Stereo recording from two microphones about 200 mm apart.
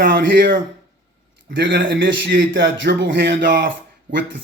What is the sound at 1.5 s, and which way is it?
A man's voice, 65° right (ahead or behind).